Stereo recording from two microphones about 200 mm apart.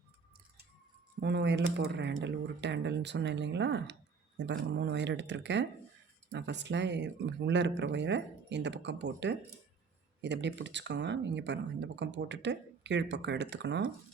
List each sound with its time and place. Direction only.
1.2 s speech: 60° right (ahead or behind)